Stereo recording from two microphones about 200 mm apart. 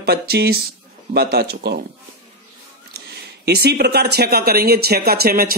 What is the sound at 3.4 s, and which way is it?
Speech, 55° right (ahead or behind).